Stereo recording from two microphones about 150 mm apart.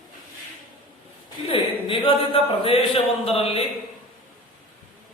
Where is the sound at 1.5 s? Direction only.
35° left (ahead or behind).